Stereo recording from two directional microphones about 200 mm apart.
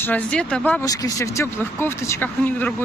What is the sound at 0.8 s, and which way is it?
Speech, 15° left (ahead or behind).